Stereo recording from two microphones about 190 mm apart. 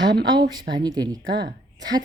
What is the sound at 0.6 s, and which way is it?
Speech, 20° right (ahead or behind).